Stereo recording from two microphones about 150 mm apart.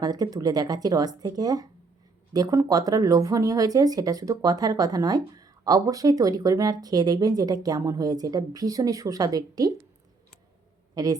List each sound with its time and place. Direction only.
0.0 s speech: 25° right (ahead or behind)
10.9 s a woman's voice: 25° right (ahead or behind)